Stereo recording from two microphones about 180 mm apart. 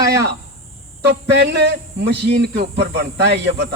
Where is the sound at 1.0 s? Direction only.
70° right (ahead or behind).